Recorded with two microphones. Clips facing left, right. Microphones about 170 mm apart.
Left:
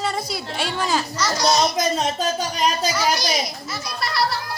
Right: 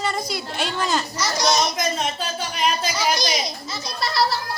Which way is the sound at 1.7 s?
40° left (ahead or behind).